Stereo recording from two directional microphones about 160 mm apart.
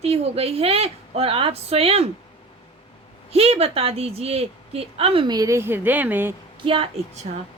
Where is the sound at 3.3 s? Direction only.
40° right (ahead or behind); by 6.3 s 10° right (ahead or behind).